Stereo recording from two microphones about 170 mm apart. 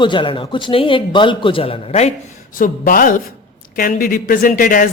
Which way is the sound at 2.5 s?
55° left (ahead or behind).